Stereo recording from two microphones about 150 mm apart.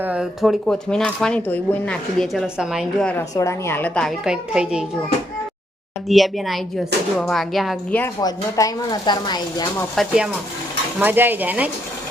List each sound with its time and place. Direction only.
0.0 s speech: 5° right (ahead or behind)
3.3 s a woman's voice: 20° left (ahead or behind)
4.2 s speech: 5° right (ahead or behind)
6.1 s speech: centre (ahead or behind)
8.2 s speech: 25° left (ahead or behind)
9.9 s speech: centre (ahead or behind)
11.0 s speech: 15° right (ahead or behind)